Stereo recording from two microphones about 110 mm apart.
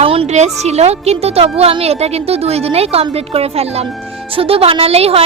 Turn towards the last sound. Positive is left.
turn(degrees=-65)  # may be behind; listen again after turning